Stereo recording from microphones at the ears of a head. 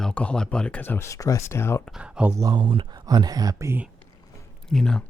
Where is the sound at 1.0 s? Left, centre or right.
Left.